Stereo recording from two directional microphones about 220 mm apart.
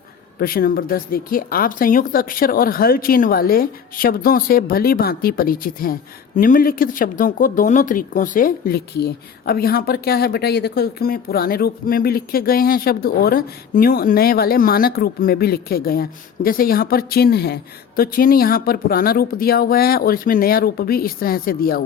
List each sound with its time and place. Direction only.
0.3 s a woman's voice: 40° left (ahead or behind)